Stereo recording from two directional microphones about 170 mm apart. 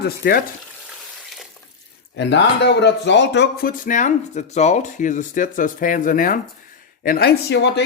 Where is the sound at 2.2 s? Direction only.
90° left.